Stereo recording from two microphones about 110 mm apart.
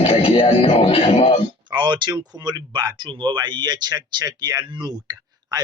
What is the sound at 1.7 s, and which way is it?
Speech, 45° right (ahead or behind).